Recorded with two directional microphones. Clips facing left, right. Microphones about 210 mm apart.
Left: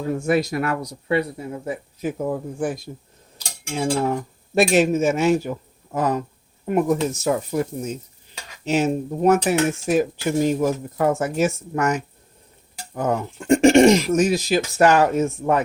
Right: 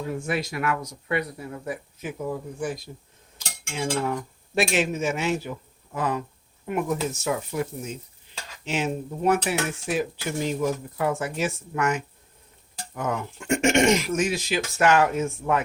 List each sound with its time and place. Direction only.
0.0 s speech: 40° left (ahead or behind); by 1.8 s 25° left (ahead or behind)
2.0 s dishes: 40° left (ahead or behind)
3.3 s cutlery: 40° left (ahead or behind)
6.7 s speech: 40° left (ahead or behind)
8.6 s dishes: 40° left (ahead or behind)
12.9 s speech: 35° left (ahead or behind)